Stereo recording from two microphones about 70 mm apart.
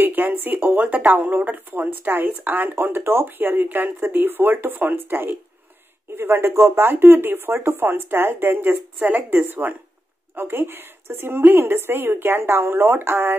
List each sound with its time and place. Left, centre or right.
0.0 s speech: right